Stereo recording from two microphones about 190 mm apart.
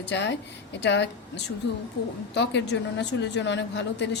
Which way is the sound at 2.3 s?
65° left (ahead or behind).